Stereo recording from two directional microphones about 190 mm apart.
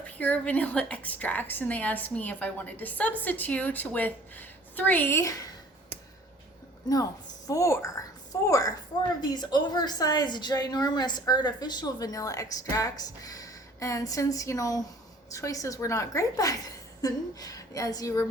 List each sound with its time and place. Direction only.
0.2 s a woman's voice: 10° left (ahead or behind)
6.8 s a woman's voice: 20° left (ahead or behind)